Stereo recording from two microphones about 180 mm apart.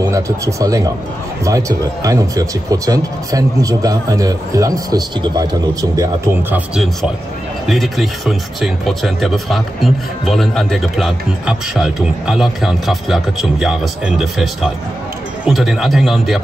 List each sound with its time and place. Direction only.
0.0 s speech: 20° right (ahead or behind)
6.7 s speech: centre (ahead or behind)